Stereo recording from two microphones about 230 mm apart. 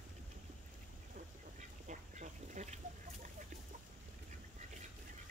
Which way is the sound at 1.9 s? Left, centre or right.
Right.